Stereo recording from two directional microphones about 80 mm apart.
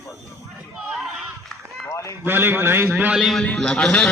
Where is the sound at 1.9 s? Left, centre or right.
Left.